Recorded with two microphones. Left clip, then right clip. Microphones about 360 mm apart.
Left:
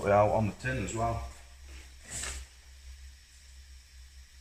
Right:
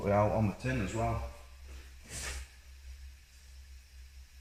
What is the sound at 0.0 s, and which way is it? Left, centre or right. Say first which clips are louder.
Speech: left 5 dB; left.